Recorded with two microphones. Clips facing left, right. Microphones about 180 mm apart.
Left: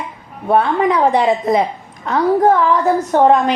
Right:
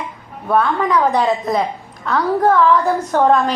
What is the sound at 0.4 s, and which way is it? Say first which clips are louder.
A woman's voice: left 3 dB; 25° left (ahead or behind).